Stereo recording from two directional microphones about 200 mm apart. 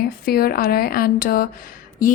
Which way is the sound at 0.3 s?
50° left (ahead or behind).